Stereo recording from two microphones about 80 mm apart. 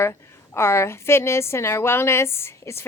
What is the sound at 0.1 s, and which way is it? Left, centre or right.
A woman's voice, left.